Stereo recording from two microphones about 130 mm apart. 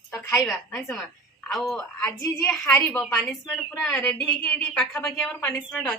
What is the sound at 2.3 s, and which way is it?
Speech, centre (ahead or behind).